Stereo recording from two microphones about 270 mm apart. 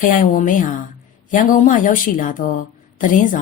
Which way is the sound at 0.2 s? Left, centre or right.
Left.